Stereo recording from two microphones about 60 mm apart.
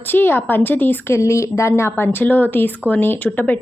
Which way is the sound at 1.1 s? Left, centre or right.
Left.